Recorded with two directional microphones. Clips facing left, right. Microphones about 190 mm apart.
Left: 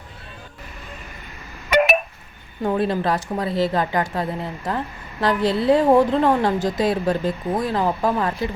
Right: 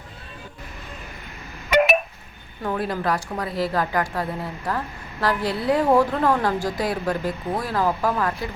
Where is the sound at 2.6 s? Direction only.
25° left (ahead or behind).